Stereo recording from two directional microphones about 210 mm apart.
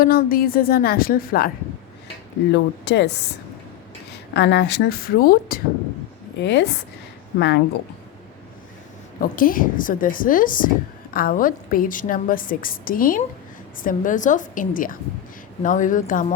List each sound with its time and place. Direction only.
0.0 s a woman's voice: 45° left (ahead or behind)
2.5 s speech: 55° left (ahead or behind)
4.4 s a woman's voice: 55° left (ahead or behind)
6.4 s speech: 55° left (ahead or behind)
9.2 s a woman's voice: 40° left (ahead or behind)